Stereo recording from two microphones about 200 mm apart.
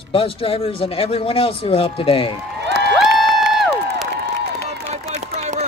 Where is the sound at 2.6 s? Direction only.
55° right (ahead or behind).